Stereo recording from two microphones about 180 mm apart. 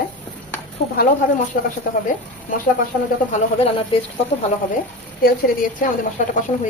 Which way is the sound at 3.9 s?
30° left (ahead or behind).